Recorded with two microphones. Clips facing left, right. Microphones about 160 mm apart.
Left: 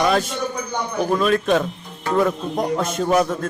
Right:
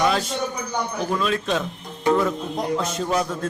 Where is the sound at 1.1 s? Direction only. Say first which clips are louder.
Left 6 dB; 50° left (ahead or behind).